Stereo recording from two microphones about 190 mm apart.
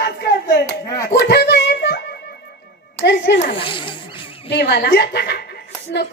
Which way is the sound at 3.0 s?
60° left (ahead or behind).